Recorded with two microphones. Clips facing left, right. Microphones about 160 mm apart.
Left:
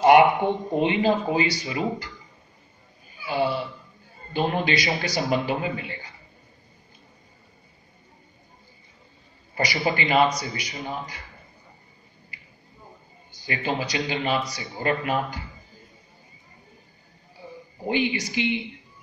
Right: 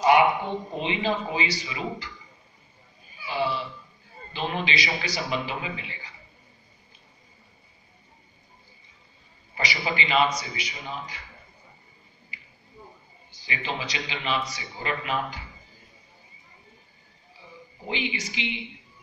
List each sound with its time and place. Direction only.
0.4 s a man's voice: 55° left (ahead or behind)
3.3 s a man's voice: 55° left (ahead or behind)
9.8 s a man's voice: 45° left (ahead or behind)
13.5 s a man's voice: 45° left (ahead or behind)
17.4 s a sound: 35° left (ahead or behind)
17.8 s a man's voice: 40° left (ahead or behind)